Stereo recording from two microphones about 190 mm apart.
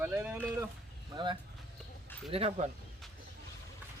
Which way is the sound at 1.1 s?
25° right (ahead or behind).